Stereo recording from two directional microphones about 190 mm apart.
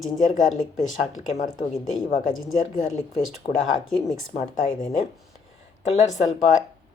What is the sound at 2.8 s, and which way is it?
Speech, 40° left (ahead or behind).